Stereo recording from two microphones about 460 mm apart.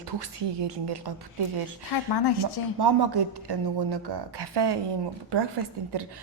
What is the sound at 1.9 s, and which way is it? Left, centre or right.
Speech, left.